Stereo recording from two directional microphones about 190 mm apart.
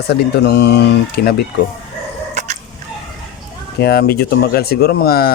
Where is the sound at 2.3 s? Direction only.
35° right (ahead or behind).